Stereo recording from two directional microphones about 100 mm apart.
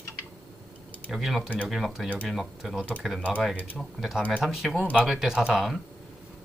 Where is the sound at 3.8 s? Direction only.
Centre (ahead or behind).